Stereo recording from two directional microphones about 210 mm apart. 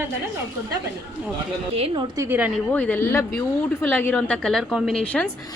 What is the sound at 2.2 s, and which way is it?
Speech, 10° right (ahead or behind).